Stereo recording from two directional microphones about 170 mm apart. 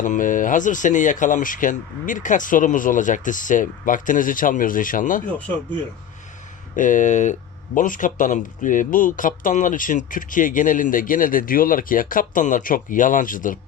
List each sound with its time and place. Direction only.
0.0 s speech: 50° left (ahead or behind)
6.7 s speech: 50° left (ahead or behind)